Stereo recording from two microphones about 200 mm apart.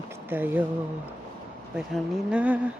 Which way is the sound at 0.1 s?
10° right (ahead or behind).